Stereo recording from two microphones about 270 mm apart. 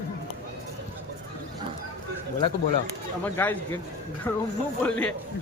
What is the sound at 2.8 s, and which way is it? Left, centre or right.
Speech, centre.